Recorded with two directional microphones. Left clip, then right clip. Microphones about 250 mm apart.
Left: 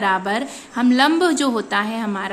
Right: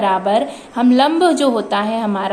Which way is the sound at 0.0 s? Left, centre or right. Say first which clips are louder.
Right 5 dB; left.